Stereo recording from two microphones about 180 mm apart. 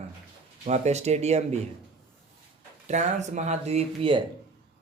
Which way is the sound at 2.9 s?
40° right (ahead or behind).